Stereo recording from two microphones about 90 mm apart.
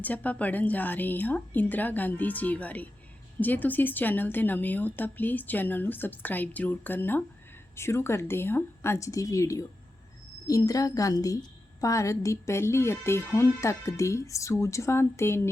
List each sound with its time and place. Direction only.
0.0 s a woman's voice: 15° left (ahead or behind)